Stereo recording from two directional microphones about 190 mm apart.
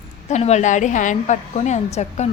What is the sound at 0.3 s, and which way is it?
A woman's voice, 35° left (ahead or behind).